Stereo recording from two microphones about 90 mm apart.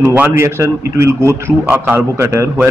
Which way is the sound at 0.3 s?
30° right (ahead or behind).